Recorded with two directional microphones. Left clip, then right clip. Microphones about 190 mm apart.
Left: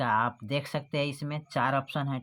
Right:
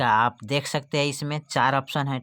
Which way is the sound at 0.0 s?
35° right (ahead or behind).